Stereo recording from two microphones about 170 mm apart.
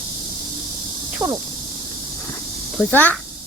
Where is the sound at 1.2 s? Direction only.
25° right (ahead or behind).